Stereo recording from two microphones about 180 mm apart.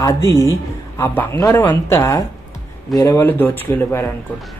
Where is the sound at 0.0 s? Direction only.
20° left (ahead or behind).